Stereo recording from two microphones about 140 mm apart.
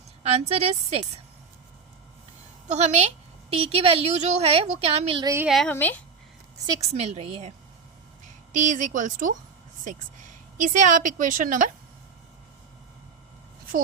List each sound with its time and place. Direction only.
0.2 s a woman's voice: 50° right (ahead or behind)
2.6 s a woman's voice: 50° right (ahead or behind)
5.2 s speech: 20° right (ahead or behind)
5.5 s speech: centre (ahead or behind)
5.7 s speech: 15° left (ahead or behind)
6.9 s a woman's voice: 50° right (ahead or behind)
8.5 s a woman's voice: 60° right (ahead or behind)
10.6 s a woman's voice: 65° right (ahead or behind)